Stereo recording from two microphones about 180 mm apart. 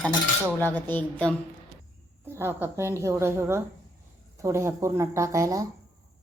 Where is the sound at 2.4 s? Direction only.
15° right (ahead or behind).